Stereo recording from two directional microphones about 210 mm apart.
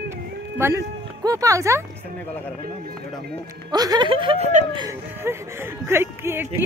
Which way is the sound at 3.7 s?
20° right (ahead or behind).